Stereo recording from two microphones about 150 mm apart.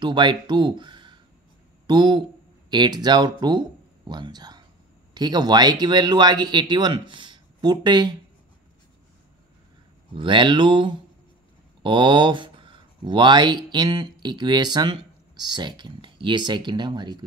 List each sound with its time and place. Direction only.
0.0 s speech: 30° right (ahead or behind)
10.1 s speech: 30° right (ahead or behind)